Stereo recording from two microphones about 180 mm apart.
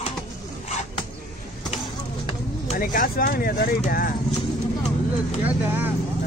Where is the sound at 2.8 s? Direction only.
50° left (ahead or behind).